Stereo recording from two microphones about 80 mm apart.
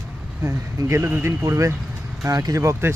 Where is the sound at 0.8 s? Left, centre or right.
Right.